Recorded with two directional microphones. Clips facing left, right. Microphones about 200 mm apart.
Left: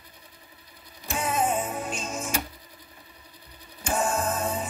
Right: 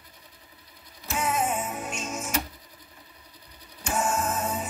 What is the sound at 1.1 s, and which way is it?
Music, 35° left (ahead or behind).